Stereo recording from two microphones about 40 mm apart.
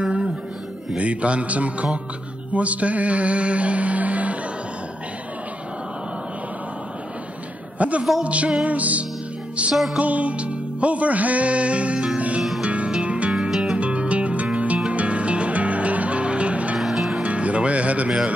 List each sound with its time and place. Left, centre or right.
0.0 s music: right
7.8 s a sound: right
8.2 s music: right
13.4 s music: centre
13.7 s music: right
16.7 s music: centre
17.2 s music: right